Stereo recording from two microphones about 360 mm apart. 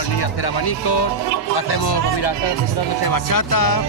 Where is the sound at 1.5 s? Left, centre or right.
Left.